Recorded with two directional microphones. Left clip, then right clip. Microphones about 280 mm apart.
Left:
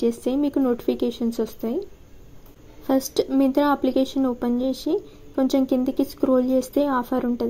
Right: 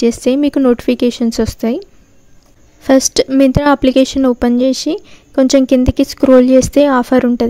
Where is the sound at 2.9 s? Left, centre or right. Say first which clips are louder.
Right 11 dB; right.